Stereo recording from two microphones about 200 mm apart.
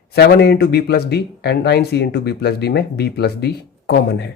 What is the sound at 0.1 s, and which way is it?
Speech, 55° left (ahead or behind).